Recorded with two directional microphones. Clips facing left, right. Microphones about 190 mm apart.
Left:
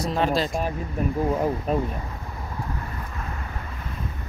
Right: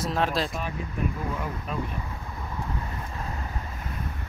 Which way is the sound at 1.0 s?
40° left (ahead or behind).